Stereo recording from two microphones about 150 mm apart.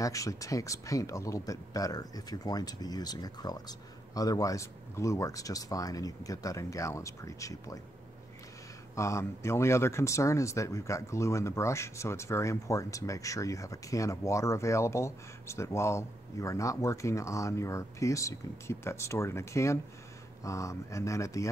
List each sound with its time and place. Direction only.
0.0 s speech: 20° left (ahead or behind)
8.9 s speech: 20° left (ahead or behind)